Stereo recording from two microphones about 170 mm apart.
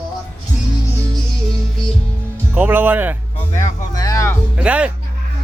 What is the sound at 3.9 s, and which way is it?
Speech, 20° left (ahead or behind).